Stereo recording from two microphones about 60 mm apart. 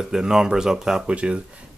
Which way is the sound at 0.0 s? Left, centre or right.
Centre.